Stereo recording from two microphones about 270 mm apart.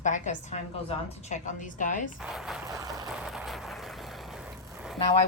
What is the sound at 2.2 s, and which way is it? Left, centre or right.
Speech, centre.